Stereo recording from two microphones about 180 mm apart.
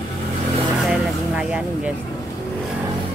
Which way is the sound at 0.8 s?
Centre (ahead or behind).